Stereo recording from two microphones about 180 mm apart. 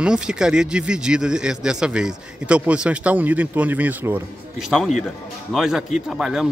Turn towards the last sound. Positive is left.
turn(degrees=-5)  # may be behind; listen again after turning